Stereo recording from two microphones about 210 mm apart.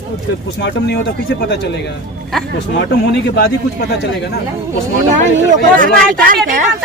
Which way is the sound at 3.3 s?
55° left (ahead or behind).